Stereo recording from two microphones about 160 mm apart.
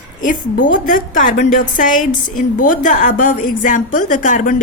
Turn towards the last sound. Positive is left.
turn(degrees=50)  # may be behind; listen again after turning